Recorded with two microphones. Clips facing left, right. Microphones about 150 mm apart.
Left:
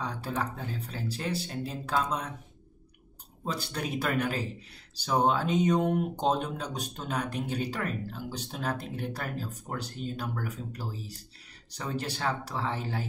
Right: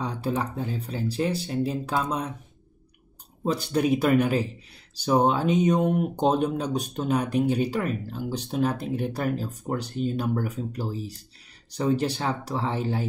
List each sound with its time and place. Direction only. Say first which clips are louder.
0.0 s speech: right 5 dB; 20° right (ahead or behind)
3.4 s speech: right 10 dB; 15° right (ahead or behind)